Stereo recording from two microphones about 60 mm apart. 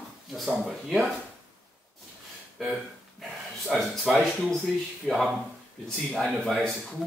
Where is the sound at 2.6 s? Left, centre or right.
Centre.